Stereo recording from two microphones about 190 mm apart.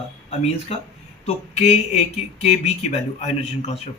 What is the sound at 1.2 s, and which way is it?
Speech, 35° left (ahead or behind).